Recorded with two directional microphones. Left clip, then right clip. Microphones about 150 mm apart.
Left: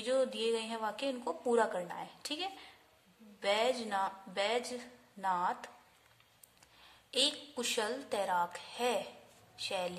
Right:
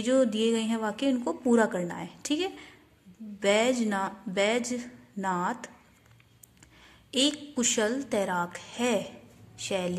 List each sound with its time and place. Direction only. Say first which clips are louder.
0.0 s a woman's voice: right 7 dB; 15° right (ahead or behind)
6.8 s a woman's voice: right 5 dB; 15° right (ahead or behind)